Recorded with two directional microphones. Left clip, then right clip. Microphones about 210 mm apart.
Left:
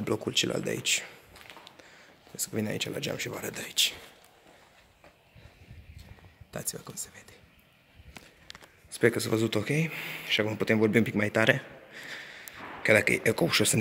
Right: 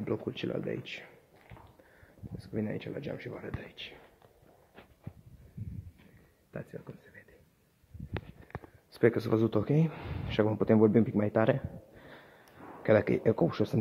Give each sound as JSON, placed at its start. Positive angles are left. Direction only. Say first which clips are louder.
{"t": 0.0, "sound": "speech", "louder": "left 7 dB", "side_deg": 15}
{"t": 2.3, "sound": "speech", "louder": "left 5 dB", "side_deg": 15}
{"t": 6.5, "sound": "speech", "louder": "left 5 dB", "side_deg": 15}
{"t": 8.9, "sound": "speech", "louder": "left 1 dB", "side_deg": 0}
{"t": 10.8, "sound": "a man's voice", "louder": "left 2 dB", "side_deg": 0}